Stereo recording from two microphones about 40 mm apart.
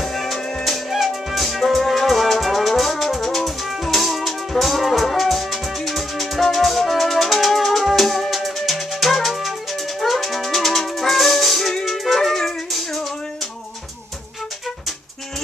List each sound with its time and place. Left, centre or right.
0.0 s music: centre